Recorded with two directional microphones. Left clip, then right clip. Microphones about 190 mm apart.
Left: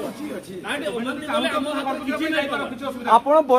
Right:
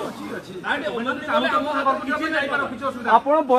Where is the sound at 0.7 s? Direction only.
45° left (ahead or behind).